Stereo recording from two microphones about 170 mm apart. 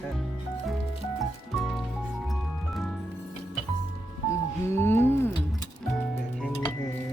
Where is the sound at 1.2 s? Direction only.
Centre (ahead or behind).